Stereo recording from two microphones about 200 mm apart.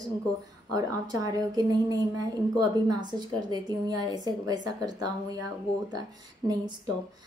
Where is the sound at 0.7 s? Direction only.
20° right (ahead or behind).